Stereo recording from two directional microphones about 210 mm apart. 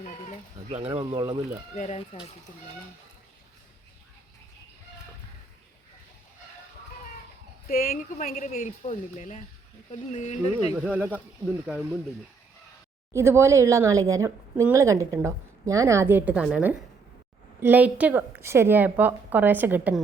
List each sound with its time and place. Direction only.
0.9 s speech: 20° right (ahead or behind)
1.7 s speech: 35° left (ahead or behind)
7.7 s speech: 45° left (ahead or behind)
10.8 s speech: 5° right (ahead or behind)
13.1 s speech: 10° right (ahead or behind)